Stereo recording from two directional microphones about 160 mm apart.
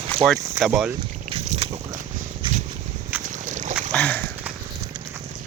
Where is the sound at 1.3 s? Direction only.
35° right (ahead or behind).